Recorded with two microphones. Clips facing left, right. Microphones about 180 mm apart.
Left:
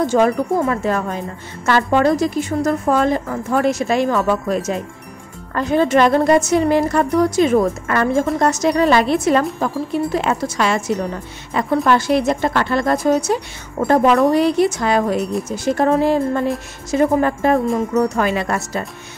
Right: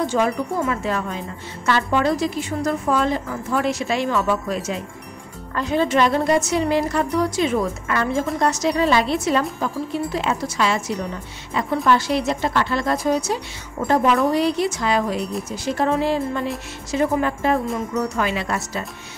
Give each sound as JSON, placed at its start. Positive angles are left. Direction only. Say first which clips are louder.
{"t": 0.0, "sound": "a woman's voice", "louder": "left 5 dB", "side_deg": 45}